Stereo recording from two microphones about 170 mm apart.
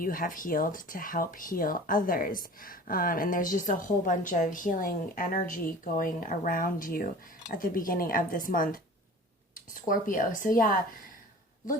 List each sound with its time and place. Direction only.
0.0 s a woman's voice: 55° left (ahead or behind)